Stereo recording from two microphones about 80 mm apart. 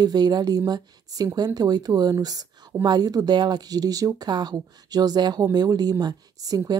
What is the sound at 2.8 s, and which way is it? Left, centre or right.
A woman's voice, right.